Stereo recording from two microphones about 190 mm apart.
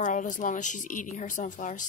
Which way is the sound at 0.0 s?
40° left (ahead or behind).